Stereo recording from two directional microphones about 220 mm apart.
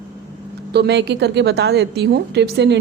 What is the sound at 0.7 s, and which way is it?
A woman's voice, 50° right (ahead or behind).